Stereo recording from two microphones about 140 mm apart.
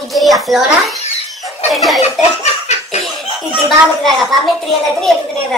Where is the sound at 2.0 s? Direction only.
50° left (ahead or behind).